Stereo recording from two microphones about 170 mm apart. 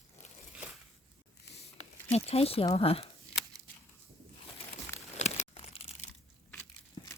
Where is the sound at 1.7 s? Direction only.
40° left (ahead or behind).